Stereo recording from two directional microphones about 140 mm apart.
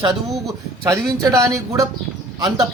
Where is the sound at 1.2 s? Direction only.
20° right (ahead or behind).